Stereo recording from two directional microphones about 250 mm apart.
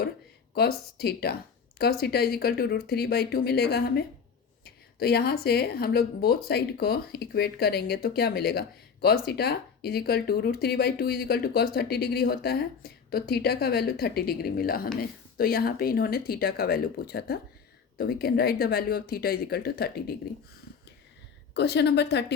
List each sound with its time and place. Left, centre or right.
0.5 s speech: left
21.5 s a woman's voice: left